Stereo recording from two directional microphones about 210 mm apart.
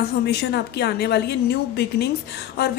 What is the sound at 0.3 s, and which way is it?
A woman's voice, 50° left (ahead or behind).